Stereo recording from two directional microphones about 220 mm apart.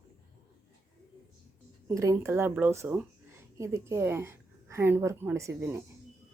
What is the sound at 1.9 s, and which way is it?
A woman's voice, 15° right (ahead or behind).